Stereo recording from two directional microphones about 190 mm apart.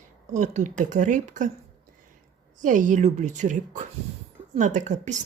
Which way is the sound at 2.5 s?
45° right (ahead or behind).